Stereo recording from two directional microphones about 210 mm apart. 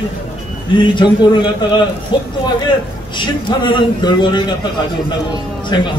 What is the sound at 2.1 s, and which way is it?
A man's voice, 20° left (ahead or behind).